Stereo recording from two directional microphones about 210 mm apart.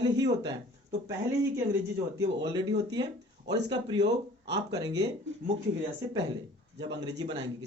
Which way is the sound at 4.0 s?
55° right (ahead or behind).